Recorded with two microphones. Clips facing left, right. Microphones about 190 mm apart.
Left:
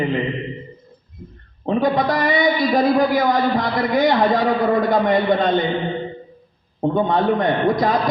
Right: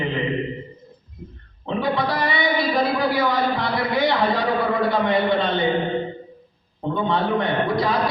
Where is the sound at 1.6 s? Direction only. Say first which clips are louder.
Left 5 dB; 45° left (ahead or behind).